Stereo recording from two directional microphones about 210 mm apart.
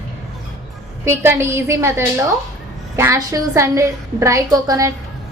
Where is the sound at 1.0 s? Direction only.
10° right (ahead or behind).